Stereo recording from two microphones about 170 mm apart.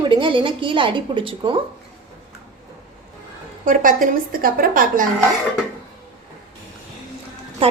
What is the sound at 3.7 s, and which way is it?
A woman's voice, 55° right (ahead or behind).